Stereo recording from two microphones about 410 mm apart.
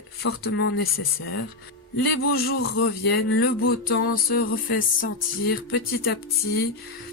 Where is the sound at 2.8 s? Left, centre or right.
Left.